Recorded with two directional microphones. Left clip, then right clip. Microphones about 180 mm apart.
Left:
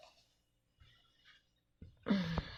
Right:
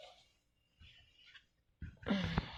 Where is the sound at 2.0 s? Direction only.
35° left (ahead or behind).